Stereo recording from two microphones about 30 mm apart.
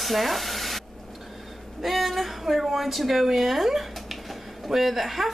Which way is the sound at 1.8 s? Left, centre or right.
Centre.